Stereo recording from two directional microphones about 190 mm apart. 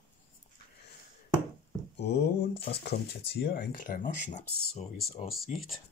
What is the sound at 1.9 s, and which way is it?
Speech, 65° left (ahead or behind).